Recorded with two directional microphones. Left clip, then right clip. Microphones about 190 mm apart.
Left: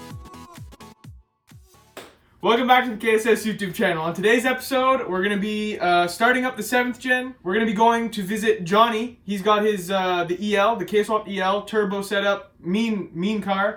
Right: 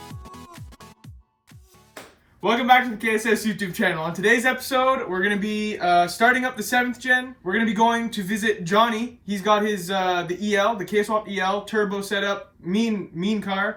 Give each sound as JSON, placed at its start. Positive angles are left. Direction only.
{"t": 0.1, "sound": "music", "side_deg": 0}
{"t": 2.4, "sound": "speech", "side_deg": 15}